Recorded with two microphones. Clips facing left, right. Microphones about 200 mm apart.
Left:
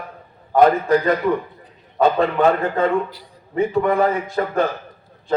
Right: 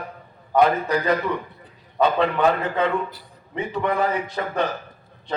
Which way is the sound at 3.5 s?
45° left (ahead or behind).